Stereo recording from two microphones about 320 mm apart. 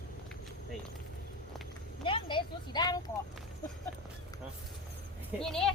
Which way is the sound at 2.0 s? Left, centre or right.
Centre.